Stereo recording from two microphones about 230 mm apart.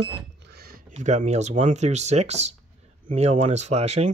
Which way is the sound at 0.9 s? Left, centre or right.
Right.